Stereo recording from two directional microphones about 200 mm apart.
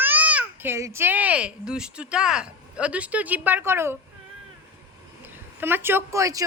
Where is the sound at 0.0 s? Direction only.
10° right (ahead or behind).